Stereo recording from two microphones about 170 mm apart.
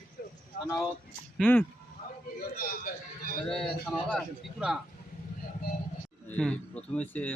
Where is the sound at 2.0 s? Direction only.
55° left (ahead or behind).